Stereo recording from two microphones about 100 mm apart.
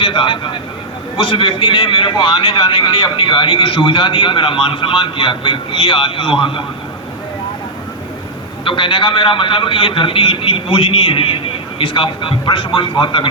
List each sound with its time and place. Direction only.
0.0 s a man's voice: 55° left (ahead or behind)
8.6 s a man's voice: 55° left (ahead or behind)